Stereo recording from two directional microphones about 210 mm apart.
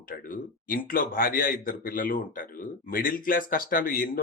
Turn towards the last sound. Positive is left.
turn(degrees=40)  # may be behind; listen again after turning